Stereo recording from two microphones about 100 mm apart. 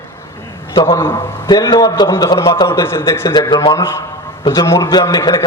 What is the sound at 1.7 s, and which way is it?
Speech, 45° left (ahead or behind).